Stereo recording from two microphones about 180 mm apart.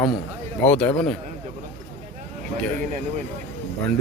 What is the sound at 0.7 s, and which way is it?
Speech, 5° left (ahead or behind).